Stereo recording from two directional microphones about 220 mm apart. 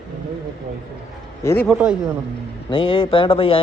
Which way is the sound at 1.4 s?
15° left (ahead or behind).